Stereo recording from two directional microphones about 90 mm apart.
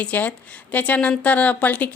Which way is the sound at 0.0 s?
15° left (ahead or behind).